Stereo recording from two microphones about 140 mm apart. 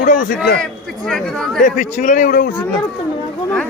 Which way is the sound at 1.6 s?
65° left (ahead or behind).